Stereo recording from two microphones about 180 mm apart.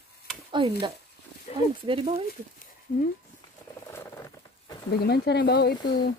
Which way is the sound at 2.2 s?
50° left (ahead or behind).